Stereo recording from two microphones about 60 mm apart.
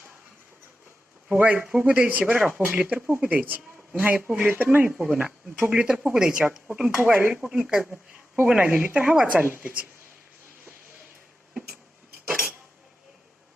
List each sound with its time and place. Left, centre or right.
1.3 s speech: right
1.6 s speech: centre
4.9 s speech: centre